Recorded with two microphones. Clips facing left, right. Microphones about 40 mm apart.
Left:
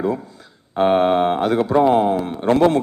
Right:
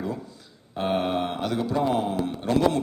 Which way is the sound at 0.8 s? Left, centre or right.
Left.